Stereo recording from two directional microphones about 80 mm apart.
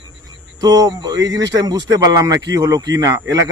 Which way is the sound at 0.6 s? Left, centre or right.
Right.